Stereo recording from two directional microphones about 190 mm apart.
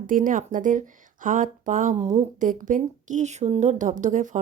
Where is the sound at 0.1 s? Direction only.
45° right (ahead or behind).